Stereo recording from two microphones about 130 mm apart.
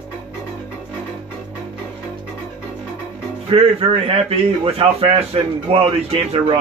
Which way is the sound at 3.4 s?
45° right (ahead or behind).